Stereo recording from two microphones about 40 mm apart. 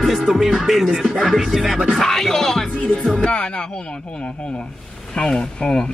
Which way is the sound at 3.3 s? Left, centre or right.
Left.